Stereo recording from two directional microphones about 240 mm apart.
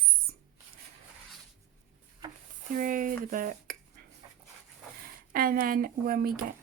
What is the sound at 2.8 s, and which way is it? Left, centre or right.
Speech, right.